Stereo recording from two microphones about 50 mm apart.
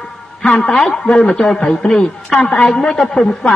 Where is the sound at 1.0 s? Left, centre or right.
Centre.